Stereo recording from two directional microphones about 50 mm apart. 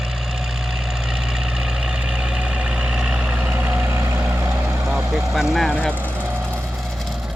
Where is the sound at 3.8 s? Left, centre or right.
Right.